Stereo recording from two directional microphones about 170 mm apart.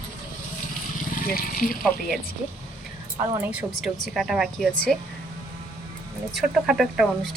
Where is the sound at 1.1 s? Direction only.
55° left (ahead or behind).